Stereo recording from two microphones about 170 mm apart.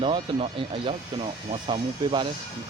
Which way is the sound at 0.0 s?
35° right (ahead or behind).